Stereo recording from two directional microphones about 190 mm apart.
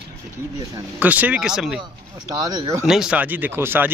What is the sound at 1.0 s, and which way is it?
Speech, 10° right (ahead or behind).